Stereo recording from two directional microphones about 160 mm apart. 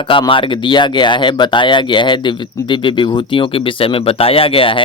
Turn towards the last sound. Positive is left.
turn(degrees=35)  # may be behind; listen again after turning